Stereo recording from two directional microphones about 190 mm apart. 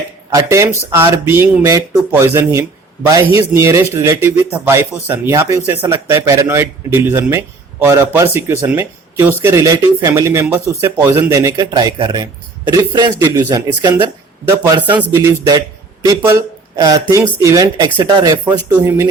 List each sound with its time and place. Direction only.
0.3 s speech: 15° right (ahead or behind)